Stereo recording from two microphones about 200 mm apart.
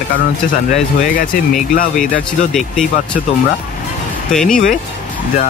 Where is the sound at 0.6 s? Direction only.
40° left (ahead or behind).